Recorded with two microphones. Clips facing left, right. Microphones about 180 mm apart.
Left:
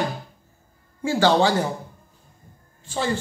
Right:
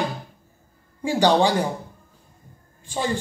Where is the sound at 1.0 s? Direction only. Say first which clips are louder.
Even; 15° right (ahead or behind).